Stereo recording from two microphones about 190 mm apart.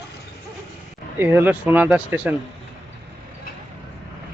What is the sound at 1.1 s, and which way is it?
Speech, 10° right (ahead or behind).